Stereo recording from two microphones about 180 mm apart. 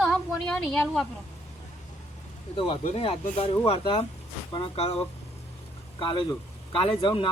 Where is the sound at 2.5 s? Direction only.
30° left (ahead or behind).